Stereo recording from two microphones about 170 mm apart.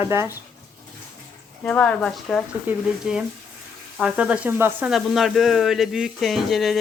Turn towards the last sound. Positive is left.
turn(degrees=0)  # may be behind; listen again after turning